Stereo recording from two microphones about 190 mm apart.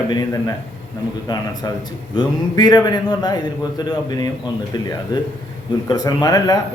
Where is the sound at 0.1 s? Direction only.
20° left (ahead or behind).